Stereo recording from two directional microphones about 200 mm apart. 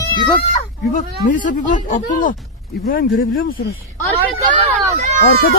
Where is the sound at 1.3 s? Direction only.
40° left (ahead or behind).